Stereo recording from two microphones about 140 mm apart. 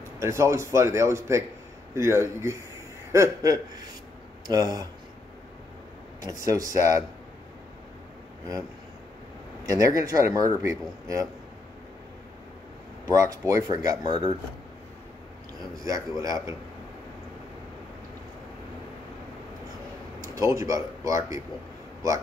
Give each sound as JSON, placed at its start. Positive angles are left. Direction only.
{"t": 0.2, "sound": "speech", "side_deg": -20}
{"t": 6.2, "sound": "speech", "side_deg": -25}
{"t": 9.7, "sound": "speech", "side_deg": -25}
{"t": 13.0, "sound": "speech", "side_deg": -25}
{"t": 15.8, "sound": "speech", "side_deg": -25}
{"t": 20.2, "sound": "speech", "side_deg": -20}